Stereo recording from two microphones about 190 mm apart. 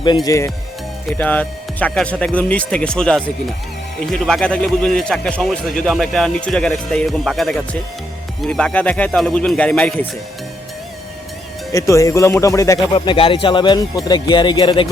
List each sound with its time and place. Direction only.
0.0 s a man's voice: 20° left (ahead or behind); by 10.1 s 5° left (ahead or behind)
11.7 s speech: 15° left (ahead or behind)